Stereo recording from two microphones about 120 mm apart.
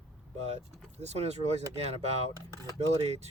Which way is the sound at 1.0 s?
65° right (ahead or behind).